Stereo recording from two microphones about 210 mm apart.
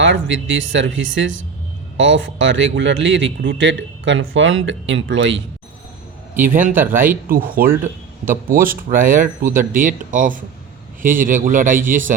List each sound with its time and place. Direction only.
0.0 s speech: 60° right (ahead or behind)
6.5 s speech: 40° right (ahead or behind)